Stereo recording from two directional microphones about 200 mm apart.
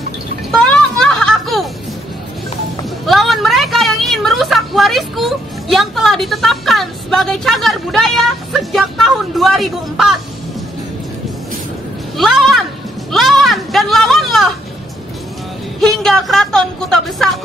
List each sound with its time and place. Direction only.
0.5 s music: 5° left (ahead or behind)
3.1 s a woman's voice: centre (ahead or behind)
12.2 s speech: centre (ahead or behind)
13.1 s a sound: centre (ahead or behind)
15.8 s speech: centre (ahead or behind)